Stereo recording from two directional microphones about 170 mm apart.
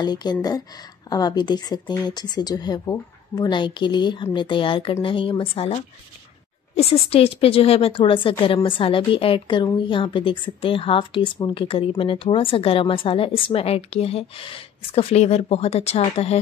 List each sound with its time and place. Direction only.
0.0 s a woman's voice: 25° left (ahead or behind)